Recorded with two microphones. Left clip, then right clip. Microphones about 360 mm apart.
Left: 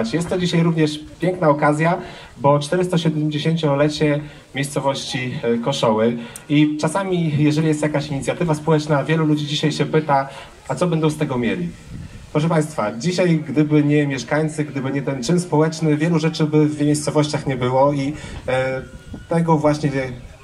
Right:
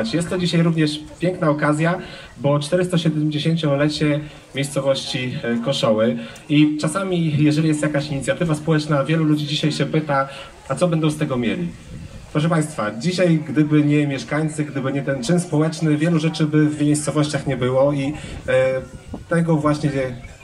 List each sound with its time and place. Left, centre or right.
0.0 s speech: centre